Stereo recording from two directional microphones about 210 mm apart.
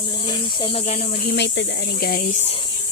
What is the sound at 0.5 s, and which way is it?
Speech, 25° left (ahead or behind).